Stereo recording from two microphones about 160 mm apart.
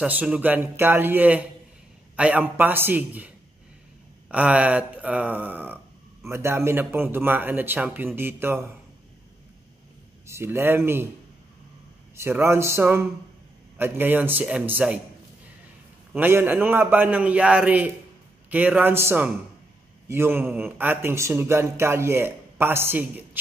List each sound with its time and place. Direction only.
0.0 s a man's voice: 10° right (ahead or behind)
10.2 s a man's voice: 15° right (ahead or behind)
12.2 s a man's voice: 15° right (ahead or behind)
16.1 s a man's voice: 15° right (ahead or behind)